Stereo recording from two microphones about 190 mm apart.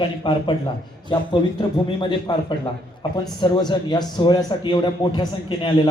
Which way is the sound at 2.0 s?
25° left (ahead or behind).